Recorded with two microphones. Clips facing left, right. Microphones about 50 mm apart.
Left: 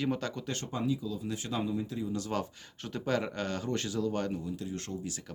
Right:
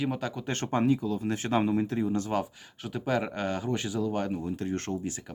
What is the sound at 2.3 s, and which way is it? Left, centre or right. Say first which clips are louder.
Speech: right 4 dB; centre.